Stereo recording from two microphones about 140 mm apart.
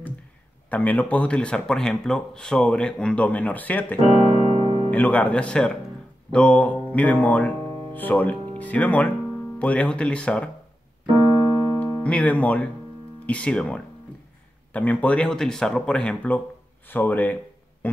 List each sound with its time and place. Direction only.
0.7 s speech: 10° left (ahead or behind)
4.1 s music: 50° right (ahead or behind)
4.9 s speech: 10° left (ahead or behind)
11.8 s speech: 10° left (ahead or behind)